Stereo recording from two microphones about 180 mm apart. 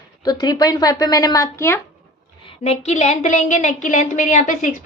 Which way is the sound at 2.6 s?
35° left (ahead or behind).